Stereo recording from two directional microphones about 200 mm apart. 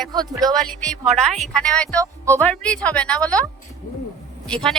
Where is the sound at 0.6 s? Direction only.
5° left (ahead or behind).